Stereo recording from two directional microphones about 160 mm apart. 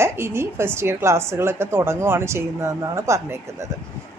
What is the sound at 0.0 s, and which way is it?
A woman's voice, 15° right (ahead or behind).